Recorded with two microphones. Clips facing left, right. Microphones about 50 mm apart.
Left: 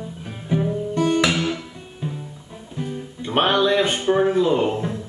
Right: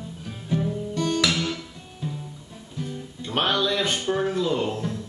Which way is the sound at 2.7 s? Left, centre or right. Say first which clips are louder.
Left 4 dB; left.